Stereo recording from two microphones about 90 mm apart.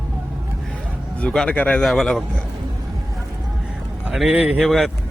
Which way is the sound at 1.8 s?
Centre (ahead or behind).